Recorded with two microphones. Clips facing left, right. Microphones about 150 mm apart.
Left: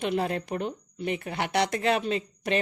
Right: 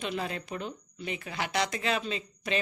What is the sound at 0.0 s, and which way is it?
Speech, 60° left (ahead or behind).